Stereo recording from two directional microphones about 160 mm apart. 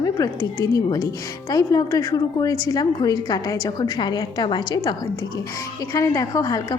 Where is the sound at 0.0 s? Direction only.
20° left (ahead or behind).